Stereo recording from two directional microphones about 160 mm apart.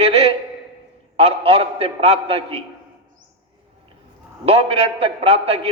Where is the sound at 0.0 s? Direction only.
40° right (ahead or behind).